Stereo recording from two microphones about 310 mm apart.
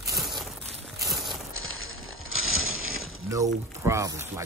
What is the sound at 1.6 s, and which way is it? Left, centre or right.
Coin, left.